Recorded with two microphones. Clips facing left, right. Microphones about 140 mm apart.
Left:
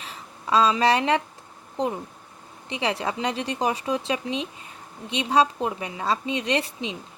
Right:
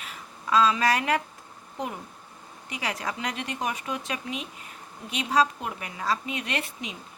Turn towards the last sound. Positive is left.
turn(degrees=30)  # may be behind; listen again after turning